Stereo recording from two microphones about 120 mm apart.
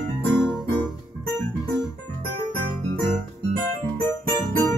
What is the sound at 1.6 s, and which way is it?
Keyboard, 30° left (ahead or behind).